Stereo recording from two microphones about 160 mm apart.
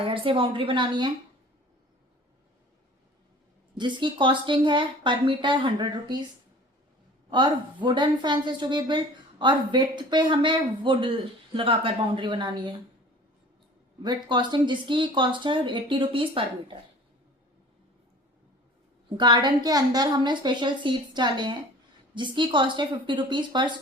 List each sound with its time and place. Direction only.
0.0 s speech: 35° right (ahead or behind)
3.8 s speech: 30° right (ahead or behind)
7.3 s a woman's voice: 30° right (ahead or behind)
14.0 s speech: 25° right (ahead or behind)
19.1 s a woman's voice: 30° right (ahead or behind)